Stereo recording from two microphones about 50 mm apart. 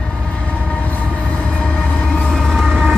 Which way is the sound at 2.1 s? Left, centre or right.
Centre.